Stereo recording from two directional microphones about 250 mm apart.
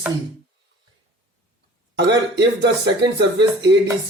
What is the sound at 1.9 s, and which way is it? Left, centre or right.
Speech, right.